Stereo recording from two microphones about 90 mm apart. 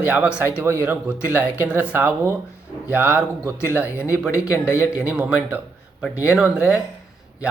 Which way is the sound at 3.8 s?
30° left (ahead or behind).